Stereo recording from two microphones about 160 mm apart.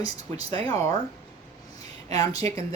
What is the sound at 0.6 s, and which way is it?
Speech, 35° right (ahead or behind).